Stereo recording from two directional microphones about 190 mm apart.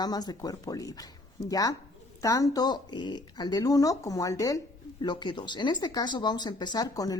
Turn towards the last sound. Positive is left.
turn(degrees=20)  # may be behind; listen again after turning